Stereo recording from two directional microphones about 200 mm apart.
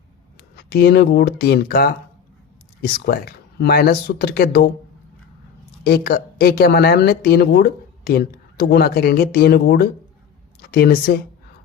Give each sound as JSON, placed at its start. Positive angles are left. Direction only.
{"t": 0.5, "sound": "speech", "side_deg": 50}
{"t": 5.8, "sound": "speech", "side_deg": 50}